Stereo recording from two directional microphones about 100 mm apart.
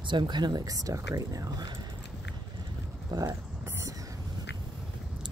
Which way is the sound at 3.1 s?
45° right (ahead or behind).